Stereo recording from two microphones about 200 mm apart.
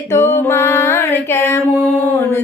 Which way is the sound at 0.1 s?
15° left (ahead or behind).